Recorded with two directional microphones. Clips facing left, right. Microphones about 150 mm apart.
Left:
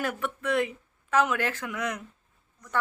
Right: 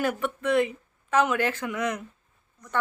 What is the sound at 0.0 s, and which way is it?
Speech, centre (ahead or behind).